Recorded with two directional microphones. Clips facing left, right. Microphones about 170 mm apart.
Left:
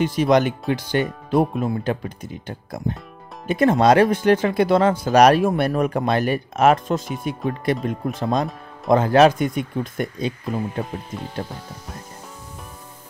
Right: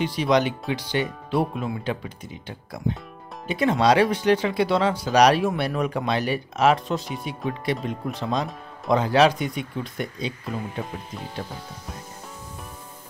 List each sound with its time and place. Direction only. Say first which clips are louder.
0.0 s speech: left 4 dB; 45° left (ahead or behind)